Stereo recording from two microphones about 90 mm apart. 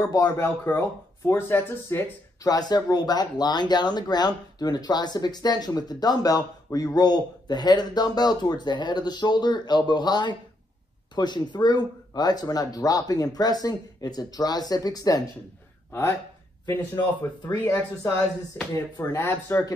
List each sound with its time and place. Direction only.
0.0 s speech: 45° left (ahead or behind)
0.4 s speech: 25° left (ahead or behind)
2.4 s speech: 45° left (ahead or behind)
15.9 s speech: 30° left (ahead or behind)
17.5 s speech: 35° left (ahead or behind)
19.0 s speech: 15° left (ahead or behind)
19.5 s speech: 30° left (ahead or behind)